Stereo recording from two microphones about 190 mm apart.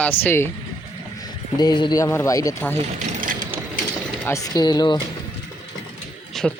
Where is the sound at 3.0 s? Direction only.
40° right (ahead or behind).